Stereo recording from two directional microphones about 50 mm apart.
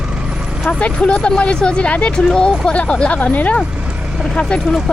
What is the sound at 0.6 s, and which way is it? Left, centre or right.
Vehicle, left.